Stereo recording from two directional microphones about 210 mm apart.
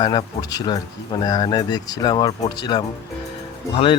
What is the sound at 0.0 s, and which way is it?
Speech, 20° left (ahead or behind).